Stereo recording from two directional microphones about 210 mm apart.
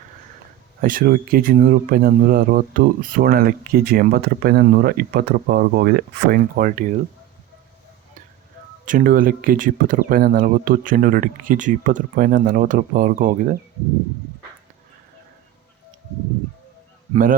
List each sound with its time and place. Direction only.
0.8 s speech: 40° right (ahead or behind)
8.8 s speech: 40° right (ahead or behind)